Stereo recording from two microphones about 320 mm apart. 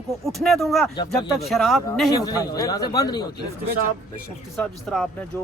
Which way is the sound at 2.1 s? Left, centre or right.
Centre.